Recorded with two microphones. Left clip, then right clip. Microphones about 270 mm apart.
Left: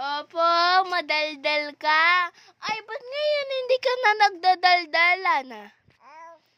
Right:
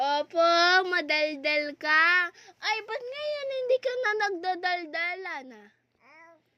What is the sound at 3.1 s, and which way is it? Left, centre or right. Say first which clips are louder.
Speech: left 10 dB; left.